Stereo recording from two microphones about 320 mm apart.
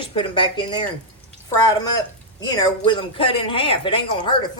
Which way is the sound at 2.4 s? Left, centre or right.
Centre.